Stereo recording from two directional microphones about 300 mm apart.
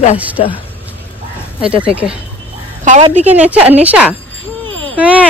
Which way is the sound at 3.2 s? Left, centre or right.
Centre.